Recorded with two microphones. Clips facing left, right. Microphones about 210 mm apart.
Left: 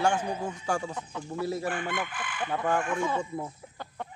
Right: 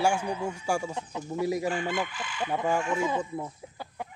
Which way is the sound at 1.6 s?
55° left (ahead or behind).